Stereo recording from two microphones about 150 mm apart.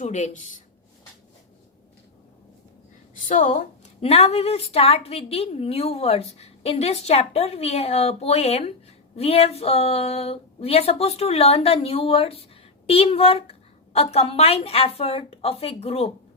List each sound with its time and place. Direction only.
0.0 s speech: 55° left (ahead or behind)
3.2 s a woman's voice: 55° left (ahead or behind)